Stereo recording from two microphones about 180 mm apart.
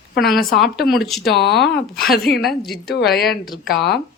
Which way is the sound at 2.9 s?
60° left (ahead or behind).